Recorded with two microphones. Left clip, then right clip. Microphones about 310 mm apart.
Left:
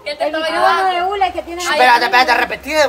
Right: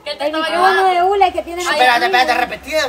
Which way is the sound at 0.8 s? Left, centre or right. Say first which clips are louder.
Right 3 dB; right.